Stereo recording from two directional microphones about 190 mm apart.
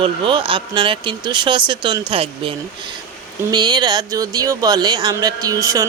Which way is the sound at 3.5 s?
20° right (ahead or behind).